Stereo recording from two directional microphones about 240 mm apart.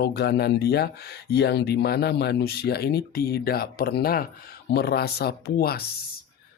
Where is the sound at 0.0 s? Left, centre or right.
Left.